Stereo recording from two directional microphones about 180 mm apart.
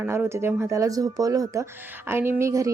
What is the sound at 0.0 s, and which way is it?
A woman's voice, 10° right (ahead or behind).